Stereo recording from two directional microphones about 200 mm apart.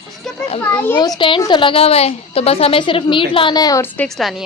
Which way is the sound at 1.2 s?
25° left (ahead or behind).